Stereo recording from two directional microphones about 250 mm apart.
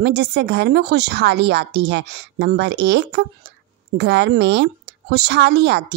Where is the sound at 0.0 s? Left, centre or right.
Right.